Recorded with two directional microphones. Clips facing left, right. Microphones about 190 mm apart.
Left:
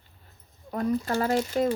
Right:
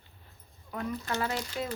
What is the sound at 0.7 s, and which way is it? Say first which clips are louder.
Speech: left 8 dB; 40° left (ahead or behind).